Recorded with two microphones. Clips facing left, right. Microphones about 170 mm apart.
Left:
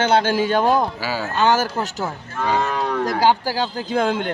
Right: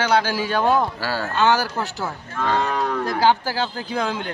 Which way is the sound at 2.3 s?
5° left (ahead or behind).